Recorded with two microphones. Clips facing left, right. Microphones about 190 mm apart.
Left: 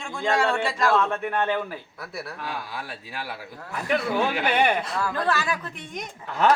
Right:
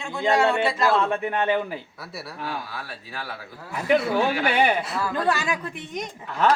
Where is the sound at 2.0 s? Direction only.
Centre (ahead or behind).